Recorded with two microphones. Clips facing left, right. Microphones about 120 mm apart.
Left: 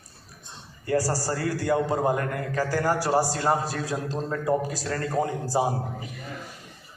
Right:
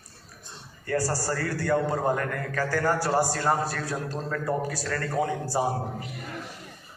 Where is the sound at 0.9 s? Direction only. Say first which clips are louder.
Left 2 dB; 15° left (ahead or behind).